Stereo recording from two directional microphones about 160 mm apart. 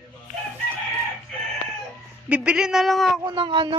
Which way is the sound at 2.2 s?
10° right (ahead or behind).